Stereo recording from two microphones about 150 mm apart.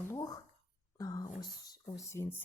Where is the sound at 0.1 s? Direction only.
25° left (ahead or behind).